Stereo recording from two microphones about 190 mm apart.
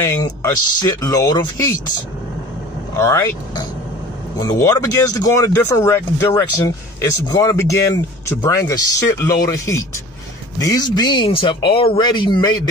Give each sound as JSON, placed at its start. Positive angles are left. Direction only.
{"t": 0.0, "sound": "speech", "side_deg": 20}
{"t": 3.0, "sound": "speech", "side_deg": 15}